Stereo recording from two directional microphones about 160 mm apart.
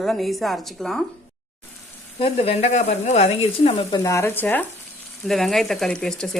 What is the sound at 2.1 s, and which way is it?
Speech, 35° left (ahead or behind).